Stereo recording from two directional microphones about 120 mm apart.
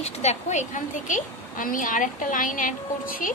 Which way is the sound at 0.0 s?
65° left (ahead or behind).